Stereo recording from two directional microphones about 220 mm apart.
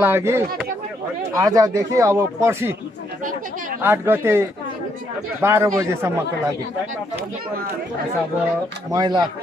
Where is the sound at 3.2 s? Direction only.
40° right (ahead or behind).